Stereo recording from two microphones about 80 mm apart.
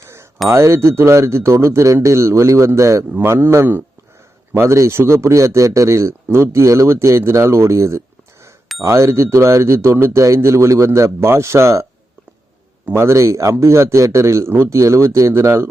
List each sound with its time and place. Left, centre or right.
0.4 s speech: right